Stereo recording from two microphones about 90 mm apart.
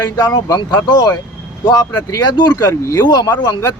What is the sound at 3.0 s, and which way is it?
Speech, 55° left (ahead or behind).